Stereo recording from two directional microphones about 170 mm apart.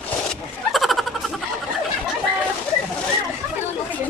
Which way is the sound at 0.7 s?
Centre (ahead or behind).